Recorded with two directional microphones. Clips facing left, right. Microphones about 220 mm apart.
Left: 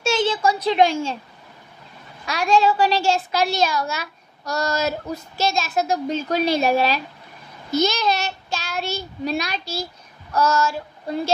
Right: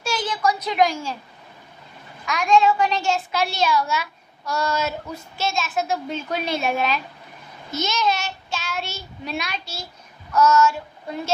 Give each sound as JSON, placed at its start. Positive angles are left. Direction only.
{"t": 0.0, "sound": "a woman's voice", "side_deg": 25}
{"t": 2.2, "sound": "a woman's voice", "side_deg": 35}